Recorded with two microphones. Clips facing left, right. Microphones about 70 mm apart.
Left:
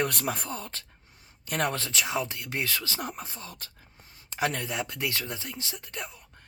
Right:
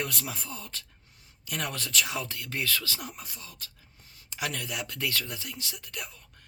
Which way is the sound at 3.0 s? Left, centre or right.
Left.